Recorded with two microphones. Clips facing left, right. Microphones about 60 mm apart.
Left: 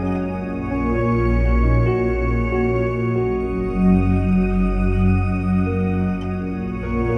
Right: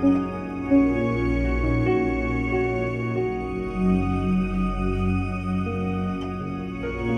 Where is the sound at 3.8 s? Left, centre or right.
Left.